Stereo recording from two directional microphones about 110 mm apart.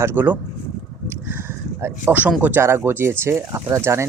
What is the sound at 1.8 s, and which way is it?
Speech, 15° right (ahead or behind).